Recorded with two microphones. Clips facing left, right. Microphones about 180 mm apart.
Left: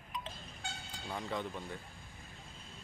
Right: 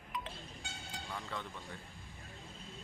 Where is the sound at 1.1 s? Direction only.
20° left (ahead or behind).